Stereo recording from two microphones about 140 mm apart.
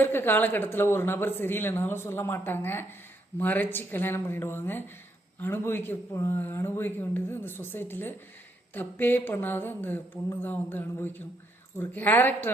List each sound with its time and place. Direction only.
0.0 s speech: 15° left (ahead or behind)